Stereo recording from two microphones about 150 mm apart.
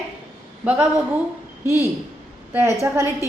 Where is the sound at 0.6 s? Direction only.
10° right (ahead or behind).